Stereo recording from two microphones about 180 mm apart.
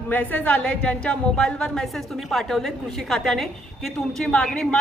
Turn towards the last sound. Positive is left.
turn(degrees=5)  # may be behind; listen again after turning